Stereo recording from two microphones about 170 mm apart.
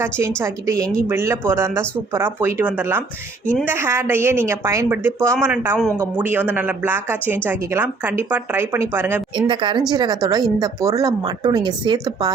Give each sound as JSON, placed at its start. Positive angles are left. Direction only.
{"t": 0.0, "sound": "speech", "side_deg": -15}
{"t": 3.4, "sound": "speech", "side_deg": 10}
{"t": 3.7, "sound": "speech", "side_deg": -15}
{"t": 9.3, "sound": "a woman's voice", "side_deg": -30}